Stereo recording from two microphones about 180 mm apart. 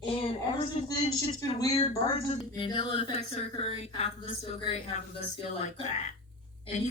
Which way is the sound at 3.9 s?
35° left (ahead or behind).